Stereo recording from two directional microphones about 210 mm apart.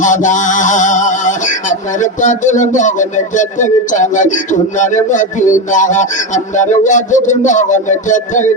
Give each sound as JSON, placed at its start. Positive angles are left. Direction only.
{"t": 0.0, "sound": "music", "side_deg": 35}